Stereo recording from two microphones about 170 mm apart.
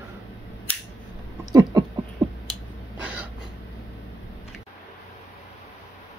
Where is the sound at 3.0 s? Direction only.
5° right (ahead or behind).